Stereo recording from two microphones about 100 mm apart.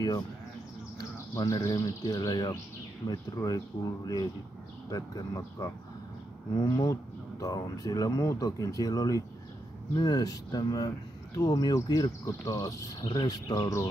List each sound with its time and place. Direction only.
1.1 s speech: 35° left (ahead or behind)
13.0 s speech: 50° left (ahead or behind)